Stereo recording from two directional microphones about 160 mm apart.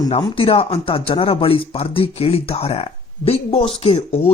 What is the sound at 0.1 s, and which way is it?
Speech, 35° left (ahead or behind).